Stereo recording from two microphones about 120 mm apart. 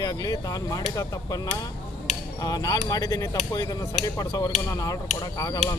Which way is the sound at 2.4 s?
30° left (ahead or behind).